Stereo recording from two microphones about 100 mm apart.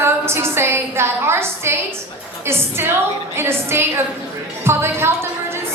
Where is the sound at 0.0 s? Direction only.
25° right (ahead or behind).